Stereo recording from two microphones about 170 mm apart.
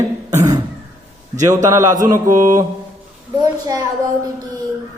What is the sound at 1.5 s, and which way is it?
A woman's voice, 15° right (ahead or behind).